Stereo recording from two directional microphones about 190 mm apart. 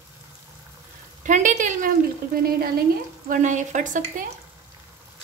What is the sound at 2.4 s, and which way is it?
Speech, 50° right (ahead or behind).